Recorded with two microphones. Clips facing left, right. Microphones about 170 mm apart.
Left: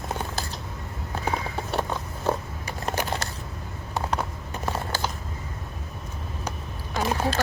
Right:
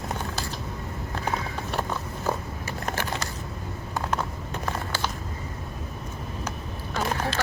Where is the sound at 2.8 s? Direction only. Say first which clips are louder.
Left 3 dB; 20° left (ahead or behind).